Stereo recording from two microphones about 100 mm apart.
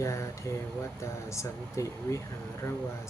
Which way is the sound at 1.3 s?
30° left (ahead or behind).